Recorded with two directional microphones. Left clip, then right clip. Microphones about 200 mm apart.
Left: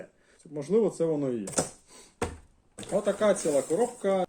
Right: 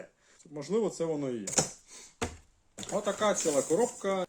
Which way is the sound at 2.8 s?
Centre (ahead or behind).